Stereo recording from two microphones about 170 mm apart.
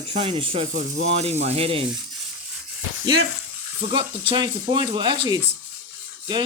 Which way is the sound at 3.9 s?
25° right (ahead or behind).